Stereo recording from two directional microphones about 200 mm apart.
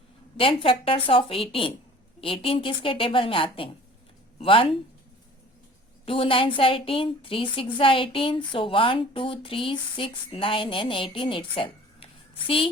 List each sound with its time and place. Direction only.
0.3 s a woman's voice: 25° left (ahead or behind)
6.1 s a woman's voice: 25° left (ahead or behind)